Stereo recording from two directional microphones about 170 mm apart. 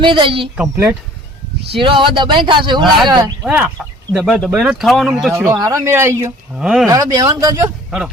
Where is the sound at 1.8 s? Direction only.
30° right (ahead or behind).